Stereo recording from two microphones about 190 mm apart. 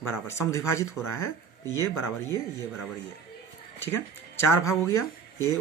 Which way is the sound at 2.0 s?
15° left (ahead or behind).